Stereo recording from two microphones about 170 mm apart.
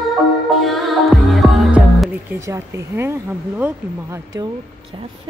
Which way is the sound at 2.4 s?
15° right (ahead or behind).